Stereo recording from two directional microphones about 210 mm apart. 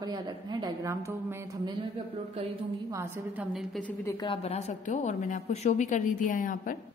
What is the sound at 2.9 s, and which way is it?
Speech, 15° right (ahead or behind).